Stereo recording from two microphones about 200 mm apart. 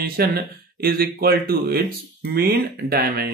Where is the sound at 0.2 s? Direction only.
50° right (ahead or behind).